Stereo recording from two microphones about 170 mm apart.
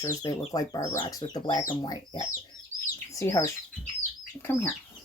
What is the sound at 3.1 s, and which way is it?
Speech, 15° left (ahead or behind).